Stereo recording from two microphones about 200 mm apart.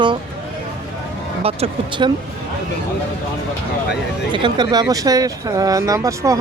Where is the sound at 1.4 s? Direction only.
30° right (ahead or behind).